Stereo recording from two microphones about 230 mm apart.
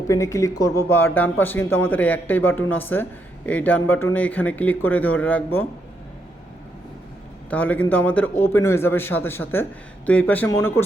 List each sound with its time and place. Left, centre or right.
0.1 s a man's voice: centre
7.5 s a man's voice: centre